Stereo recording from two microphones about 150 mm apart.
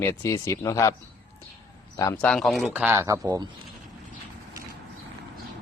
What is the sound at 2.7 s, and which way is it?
Speech, 15° right (ahead or behind).